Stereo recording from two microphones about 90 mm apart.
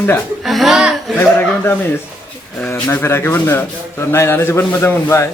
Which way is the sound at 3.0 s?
25° left (ahead or behind).